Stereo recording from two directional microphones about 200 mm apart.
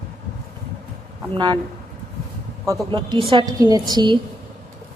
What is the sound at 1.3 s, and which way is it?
Speech, 20° right (ahead or behind).